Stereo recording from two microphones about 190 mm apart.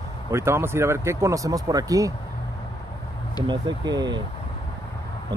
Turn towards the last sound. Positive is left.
turn(degrees=-20)  # may be behind; listen again after turning